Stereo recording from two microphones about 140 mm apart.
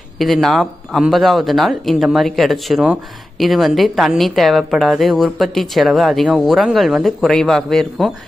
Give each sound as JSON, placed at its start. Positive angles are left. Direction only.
{"t": 0.2, "sound": "speech", "side_deg": 0}